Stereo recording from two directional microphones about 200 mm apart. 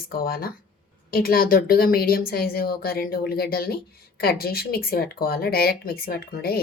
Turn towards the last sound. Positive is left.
turn(degrees=50)  # may be behind; listen again after turning